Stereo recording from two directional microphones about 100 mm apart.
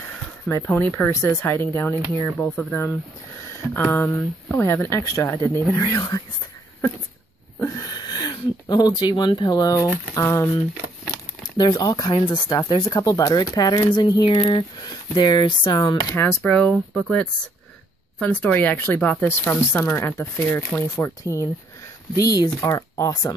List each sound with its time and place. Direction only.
0.5 s speech: 30° left (ahead or behind)
0.7 s speech: 15° left (ahead or behind)
1.0 s speech: 30° left (ahead or behind)
2.4 s speech: 10° left (ahead or behind)
5.7 s speech: 40° left (ahead or behind)
7.6 s speech: 35° left (ahead or behind)
10.1 s speech: 30° left (ahead or behind)
11.4 s speech: 45° left (ahead or behind)
14.3 s speech: 60° left (ahead or behind)
14.9 s speech: 50° left (ahead or behind)
16.2 s speech: 25° left (ahead or behind)
16.5 s speech: 10° left (ahead or behind)
18.2 s speech: 15° left (ahead or behind); by 23.3 s 30° left (ahead or behind)